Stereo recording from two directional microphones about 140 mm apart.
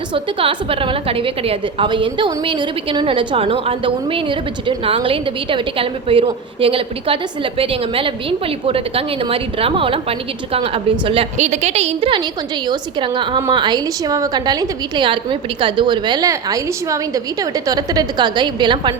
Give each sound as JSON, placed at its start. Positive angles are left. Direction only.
{"t": 0.1, "sound": "a woman's voice", "side_deg": -40}
{"t": 11.3, "sound": "a woman's voice", "side_deg": -55}